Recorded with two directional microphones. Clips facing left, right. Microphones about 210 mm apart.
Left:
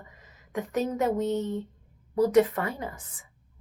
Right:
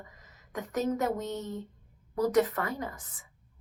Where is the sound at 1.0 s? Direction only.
30° left (ahead or behind).